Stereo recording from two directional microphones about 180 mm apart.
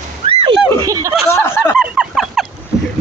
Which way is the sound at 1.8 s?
5° right (ahead or behind).